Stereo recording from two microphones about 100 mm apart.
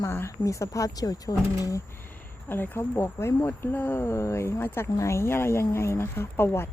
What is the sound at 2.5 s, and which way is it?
Speech, 20° left (ahead or behind).